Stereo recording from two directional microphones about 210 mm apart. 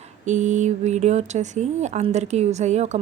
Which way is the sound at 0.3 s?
35° right (ahead or behind).